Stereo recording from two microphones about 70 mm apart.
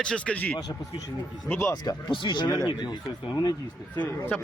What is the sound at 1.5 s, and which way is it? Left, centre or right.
Speech, left.